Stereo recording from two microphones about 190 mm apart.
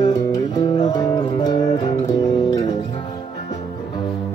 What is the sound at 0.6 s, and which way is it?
Music, 20° left (ahead or behind).